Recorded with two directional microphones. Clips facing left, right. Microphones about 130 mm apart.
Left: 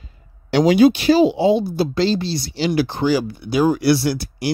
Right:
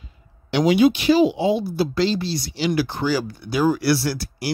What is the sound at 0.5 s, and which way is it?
Speech, 40° left (ahead or behind).